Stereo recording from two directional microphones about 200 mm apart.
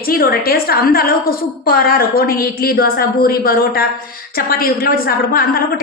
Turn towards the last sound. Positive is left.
turn(degrees=45)  # may be behind; listen again after turning